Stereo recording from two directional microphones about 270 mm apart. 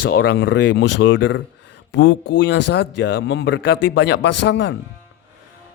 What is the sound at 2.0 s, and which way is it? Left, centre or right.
Speech, left.